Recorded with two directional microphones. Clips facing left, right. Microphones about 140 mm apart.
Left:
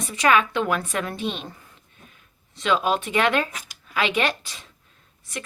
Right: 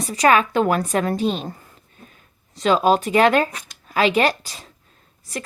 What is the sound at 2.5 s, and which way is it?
A woman's voice, 40° right (ahead or behind).